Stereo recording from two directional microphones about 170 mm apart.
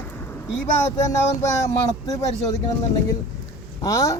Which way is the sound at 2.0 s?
20° left (ahead or behind).